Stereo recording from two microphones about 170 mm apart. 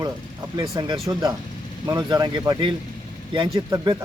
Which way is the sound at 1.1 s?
15° right (ahead or behind).